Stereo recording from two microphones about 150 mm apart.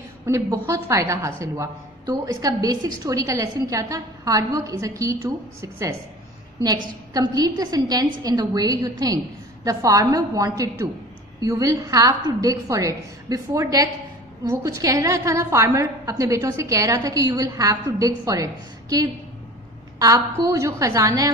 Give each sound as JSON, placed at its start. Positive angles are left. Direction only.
{"t": 0.2, "sound": "a woman's voice", "side_deg": -20}
{"t": 7.2, "sound": "a woman's voice", "side_deg": -25}